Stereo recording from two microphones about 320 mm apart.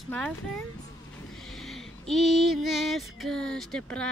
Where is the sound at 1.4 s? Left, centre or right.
Centre.